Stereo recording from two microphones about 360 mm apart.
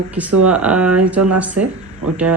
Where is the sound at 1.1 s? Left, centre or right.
Right.